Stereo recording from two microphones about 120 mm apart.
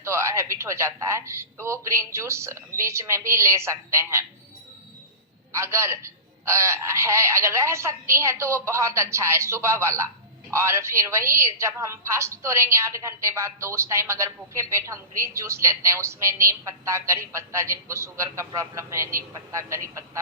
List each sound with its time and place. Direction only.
0.0 s a woman's voice: 25° right (ahead or behind)
5.5 s a woman's voice: 25° right (ahead or behind)